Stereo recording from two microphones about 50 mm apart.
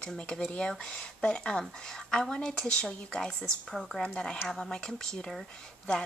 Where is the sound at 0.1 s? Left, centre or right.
Centre.